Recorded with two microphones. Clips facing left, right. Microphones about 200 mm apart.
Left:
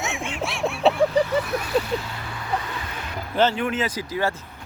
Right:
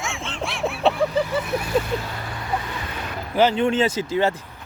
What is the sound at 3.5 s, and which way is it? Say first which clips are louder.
Speech: right 5 dB; 25° right (ahead or behind).